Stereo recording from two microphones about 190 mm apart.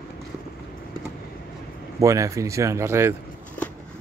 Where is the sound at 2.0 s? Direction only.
15° right (ahead or behind).